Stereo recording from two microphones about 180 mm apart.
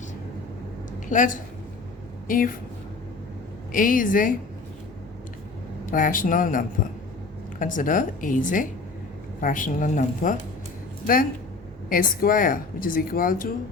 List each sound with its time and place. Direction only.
1.1 s speech: 45° left (ahead or behind)
3.7 s speech: 50° left (ahead or behind)
5.8 s speech: 50° left (ahead or behind)